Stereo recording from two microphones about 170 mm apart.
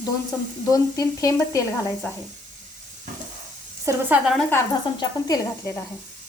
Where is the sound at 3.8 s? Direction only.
10° right (ahead or behind).